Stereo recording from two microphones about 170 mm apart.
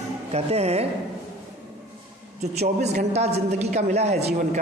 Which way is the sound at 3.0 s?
40° right (ahead or behind).